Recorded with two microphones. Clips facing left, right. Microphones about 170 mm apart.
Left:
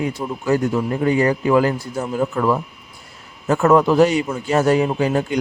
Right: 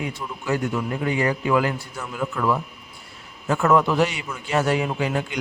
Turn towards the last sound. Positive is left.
turn(degrees=40)  # may be behind; listen again after turning